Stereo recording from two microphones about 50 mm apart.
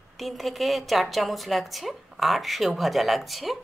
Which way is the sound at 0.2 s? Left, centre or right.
Centre.